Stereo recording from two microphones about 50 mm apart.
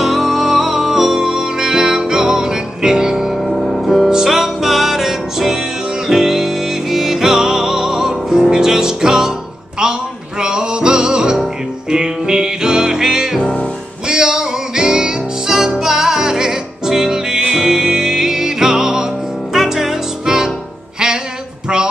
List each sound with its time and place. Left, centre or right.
0.0 s music: centre
10.4 s music: centre
13.4 s music: left
14.0 s music: centre